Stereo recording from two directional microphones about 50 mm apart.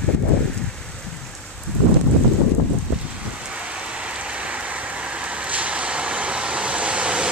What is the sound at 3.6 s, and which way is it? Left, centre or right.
Rain, right.